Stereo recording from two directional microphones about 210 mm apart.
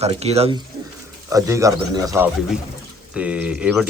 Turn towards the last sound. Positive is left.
turn(degrees=0)  # may be behind; listen again after turning